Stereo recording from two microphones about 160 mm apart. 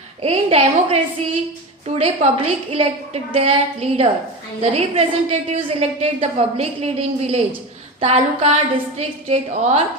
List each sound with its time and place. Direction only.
0.2 s a woman's voice: 40° right (ahead or behind)